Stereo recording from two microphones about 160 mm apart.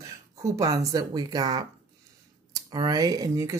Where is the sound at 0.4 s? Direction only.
20° right (ahead or behind).